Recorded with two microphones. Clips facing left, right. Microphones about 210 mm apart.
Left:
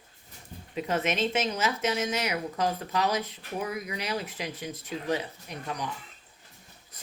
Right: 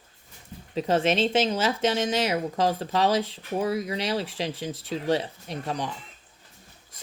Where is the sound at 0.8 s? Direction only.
30° right (ahead or behind).